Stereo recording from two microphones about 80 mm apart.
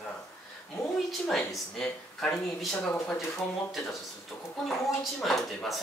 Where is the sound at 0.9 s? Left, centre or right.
Centre.